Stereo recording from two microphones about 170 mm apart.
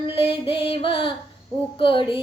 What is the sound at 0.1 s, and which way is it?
Female singing, 30° left (ahead or behind).